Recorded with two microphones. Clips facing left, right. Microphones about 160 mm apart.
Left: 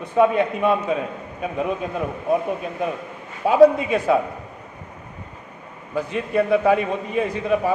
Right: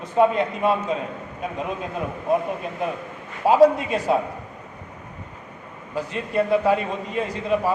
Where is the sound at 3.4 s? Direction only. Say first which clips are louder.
Left 2 dB; 55° left (ahead or behind).